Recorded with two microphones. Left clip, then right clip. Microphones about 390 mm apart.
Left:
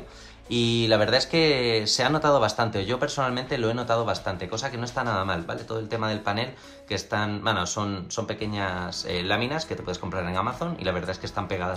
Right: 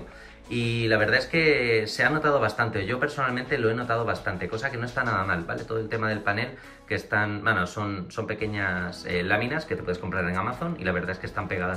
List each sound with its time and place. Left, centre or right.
0.5 s speech: left
0.8 s speech: centre